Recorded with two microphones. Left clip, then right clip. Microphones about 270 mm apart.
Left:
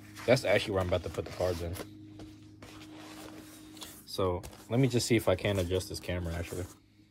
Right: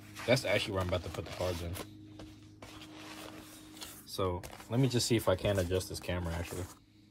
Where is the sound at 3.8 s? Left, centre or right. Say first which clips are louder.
Left 3 dB; centre.